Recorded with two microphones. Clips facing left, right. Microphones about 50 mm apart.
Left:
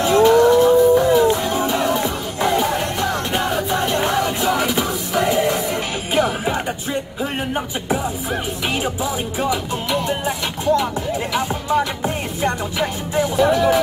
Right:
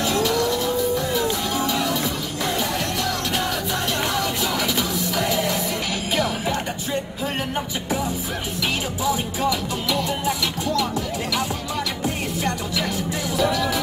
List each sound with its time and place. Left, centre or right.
0.0 s music: left
9.0 s music: left